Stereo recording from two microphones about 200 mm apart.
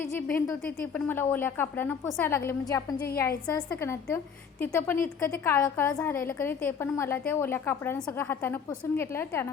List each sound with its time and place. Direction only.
0.3 s a woman's voice: 10° left (ahead or behind)